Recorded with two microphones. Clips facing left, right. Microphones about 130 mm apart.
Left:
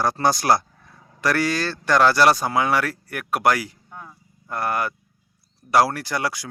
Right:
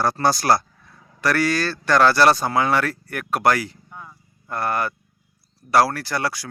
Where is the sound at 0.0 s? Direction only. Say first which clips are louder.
Right 1 dB; 15° left (ahead or behind).